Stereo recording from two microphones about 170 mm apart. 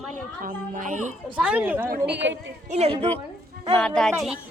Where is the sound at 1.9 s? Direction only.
85° right.